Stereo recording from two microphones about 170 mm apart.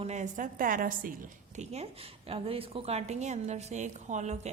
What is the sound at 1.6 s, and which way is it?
A woman's voice, 40° right (ahead or behind).